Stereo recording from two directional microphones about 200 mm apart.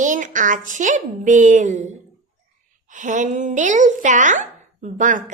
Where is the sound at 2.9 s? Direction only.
40° right (ahead or behind).